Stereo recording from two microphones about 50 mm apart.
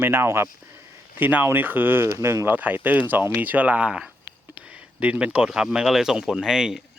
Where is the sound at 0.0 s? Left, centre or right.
Right.